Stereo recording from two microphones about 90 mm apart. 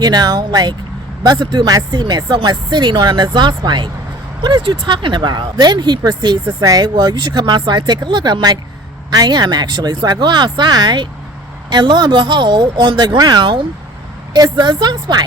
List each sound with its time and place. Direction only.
0.0 s speech: 50° right (ahead or behind)